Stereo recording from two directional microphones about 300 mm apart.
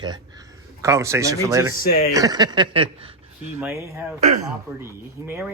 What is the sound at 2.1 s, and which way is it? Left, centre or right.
Speech, centre.